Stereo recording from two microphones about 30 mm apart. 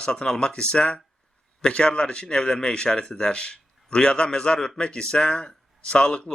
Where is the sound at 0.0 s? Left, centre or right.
Left.